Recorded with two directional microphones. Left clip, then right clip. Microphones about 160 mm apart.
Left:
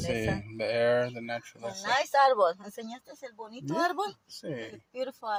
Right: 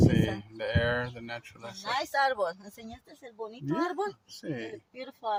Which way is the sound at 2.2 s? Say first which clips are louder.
Left 5 dB; centre (ahead or behind).